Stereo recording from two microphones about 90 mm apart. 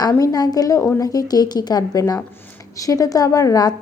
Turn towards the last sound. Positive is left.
turn(degrees=45)  # may be behind; listen again after turning